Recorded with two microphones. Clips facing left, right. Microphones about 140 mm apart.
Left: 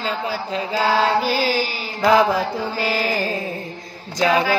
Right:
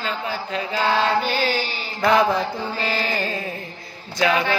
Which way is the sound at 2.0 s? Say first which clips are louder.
Left 2 dB; 5° left (ahead or behind).